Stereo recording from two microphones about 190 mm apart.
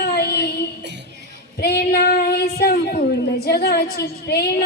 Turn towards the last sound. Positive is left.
turn(degrees=55)  # may be behind; listen again after turning